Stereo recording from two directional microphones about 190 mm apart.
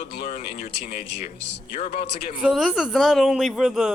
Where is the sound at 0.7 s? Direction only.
50° left (ahead or behind).